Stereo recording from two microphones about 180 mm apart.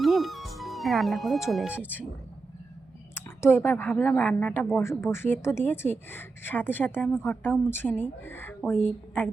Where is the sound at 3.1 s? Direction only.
10° left (ahead or behind).